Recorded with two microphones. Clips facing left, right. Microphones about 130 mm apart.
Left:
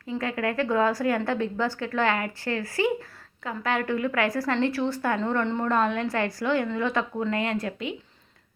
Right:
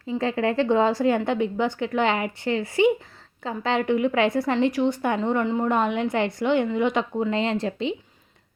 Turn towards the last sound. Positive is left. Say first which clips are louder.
# right 4 dB
turn(degrees=-25)  # may be behind; listen again after turning